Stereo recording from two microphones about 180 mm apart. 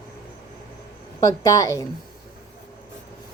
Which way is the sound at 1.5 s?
20° left (ahead or behind).